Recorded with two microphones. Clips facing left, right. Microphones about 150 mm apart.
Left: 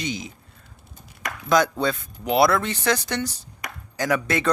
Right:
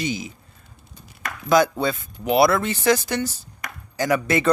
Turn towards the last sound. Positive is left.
turn(degrees=-5)  # may be behind; listen again after turning